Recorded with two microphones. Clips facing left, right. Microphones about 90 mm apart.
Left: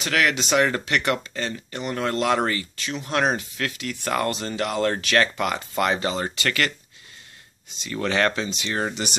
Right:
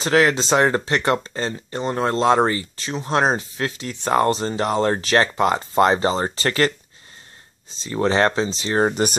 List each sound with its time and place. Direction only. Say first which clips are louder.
0.0 s speech: right 6 dB; 30° right (ahead or behind)
7.7 s speech: right 5 dB; 30° right (ahead or behind)